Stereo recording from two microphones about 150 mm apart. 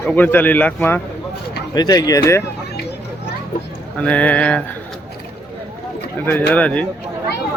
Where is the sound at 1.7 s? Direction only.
25° left (ahead or behind).